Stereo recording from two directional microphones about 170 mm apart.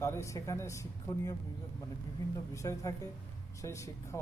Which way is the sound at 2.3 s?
20° left (ahead or behind).